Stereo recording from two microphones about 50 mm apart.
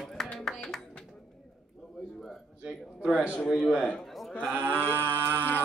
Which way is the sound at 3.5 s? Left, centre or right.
Centre.